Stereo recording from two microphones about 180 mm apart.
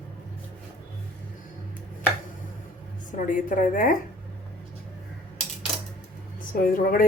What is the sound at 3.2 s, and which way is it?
Speech, 45° left (ahead or behind).